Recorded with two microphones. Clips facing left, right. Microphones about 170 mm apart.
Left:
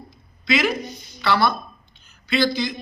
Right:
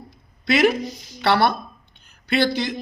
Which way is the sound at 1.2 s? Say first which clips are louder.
Right 2 dB; 65° right (ahead or behind).